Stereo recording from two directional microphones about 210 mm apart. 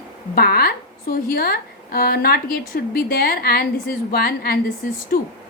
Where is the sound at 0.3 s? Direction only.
45° left (ahead or behind).